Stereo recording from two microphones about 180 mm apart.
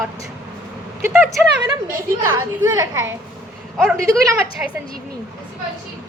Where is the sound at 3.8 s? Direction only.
Centre (ahead or behind).